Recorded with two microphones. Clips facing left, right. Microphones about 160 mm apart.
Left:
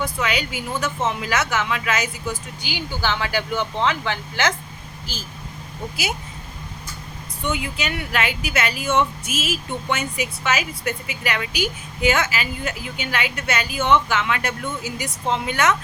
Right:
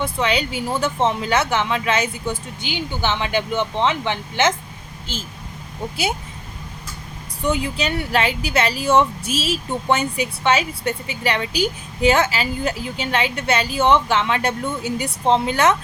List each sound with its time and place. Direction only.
0.0 s speech: 30° right (ahead or behind)
7.4 s speech: 35° right (ahead or behind)